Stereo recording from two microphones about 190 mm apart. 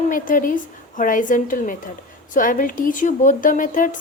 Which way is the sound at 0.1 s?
45° left (ahead or behind).